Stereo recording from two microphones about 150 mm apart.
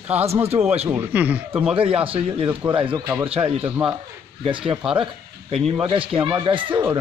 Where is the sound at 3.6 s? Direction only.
15° right (ahead or behind).